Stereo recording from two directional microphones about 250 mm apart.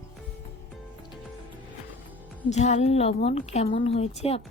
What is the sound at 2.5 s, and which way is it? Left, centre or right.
Speech, left.